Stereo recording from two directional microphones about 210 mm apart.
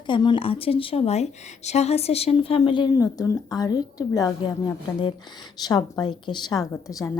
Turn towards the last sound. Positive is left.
turn(degrees=15)  # may be behind; listen again after turning